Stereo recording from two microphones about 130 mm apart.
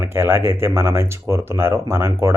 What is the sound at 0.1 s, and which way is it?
Speech, 20° right (ahead or behind).